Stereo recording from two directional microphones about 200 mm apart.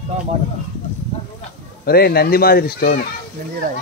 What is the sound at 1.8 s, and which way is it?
Speech, 50° left (ahead or behind).